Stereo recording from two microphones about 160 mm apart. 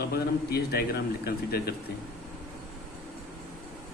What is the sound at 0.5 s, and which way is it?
A man's voice, 75° left (ahead or behind).